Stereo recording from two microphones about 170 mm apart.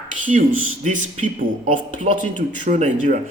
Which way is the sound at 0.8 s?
45° right (ahead or behind).